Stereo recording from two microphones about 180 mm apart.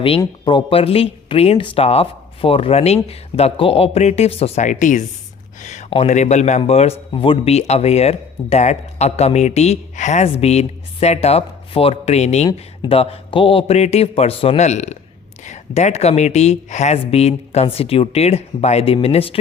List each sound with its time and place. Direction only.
0.2 s speech: 25° left (ahead or behind)